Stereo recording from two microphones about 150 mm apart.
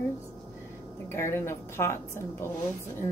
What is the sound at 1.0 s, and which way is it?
A woman's voice, 15° left (ahead or behind).